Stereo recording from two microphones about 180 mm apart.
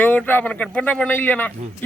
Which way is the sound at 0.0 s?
10° left (ahead or behind).